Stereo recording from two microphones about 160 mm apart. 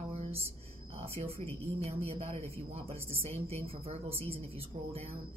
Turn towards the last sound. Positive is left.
turn(degrees=-40)  # may be behind; listen again after turning